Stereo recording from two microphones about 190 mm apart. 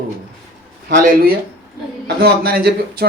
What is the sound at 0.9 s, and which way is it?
A man's voice, 50° right (ahead or behind).